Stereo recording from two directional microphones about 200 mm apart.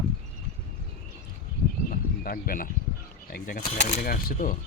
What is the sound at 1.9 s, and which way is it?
Cricket, 45° left (ahead or behind).